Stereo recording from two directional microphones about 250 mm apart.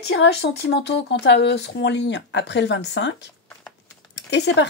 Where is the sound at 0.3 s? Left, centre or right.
Left.